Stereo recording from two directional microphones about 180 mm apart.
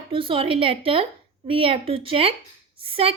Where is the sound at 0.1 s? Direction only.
30° right (ahead or behind).